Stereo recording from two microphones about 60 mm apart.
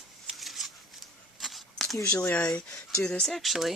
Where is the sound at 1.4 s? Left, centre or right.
Centre.